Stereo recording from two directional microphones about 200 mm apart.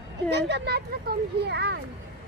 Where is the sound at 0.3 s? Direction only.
60° right (ahead or behind).